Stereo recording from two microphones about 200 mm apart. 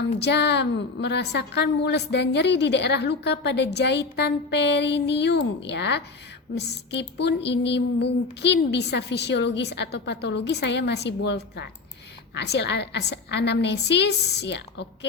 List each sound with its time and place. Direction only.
0.0 s a woman's voice: 60° left (ahead or behind)